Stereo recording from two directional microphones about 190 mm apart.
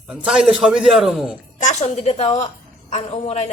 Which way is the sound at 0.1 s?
5° right (ahead or behind).